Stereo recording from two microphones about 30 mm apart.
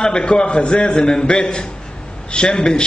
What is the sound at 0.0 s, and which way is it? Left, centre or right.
Speech, left.